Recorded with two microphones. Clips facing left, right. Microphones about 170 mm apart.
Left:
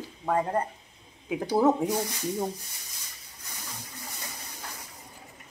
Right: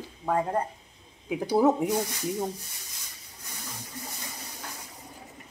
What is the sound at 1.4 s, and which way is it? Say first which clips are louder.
Speech: right 1 dB; 10° right (ahead or behind).